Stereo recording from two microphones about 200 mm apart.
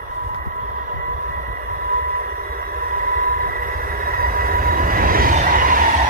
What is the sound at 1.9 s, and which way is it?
Train, 45° right (ahead or behind).